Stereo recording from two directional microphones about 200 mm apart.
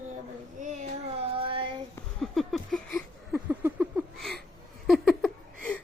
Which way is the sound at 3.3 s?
10° right (ahead or behind).